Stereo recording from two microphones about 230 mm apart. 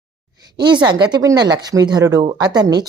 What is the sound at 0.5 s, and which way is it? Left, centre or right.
A woman's voice, centre.